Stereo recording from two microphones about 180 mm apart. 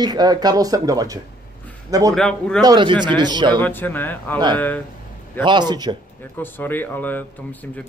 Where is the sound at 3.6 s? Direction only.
10° left (ahead or behind).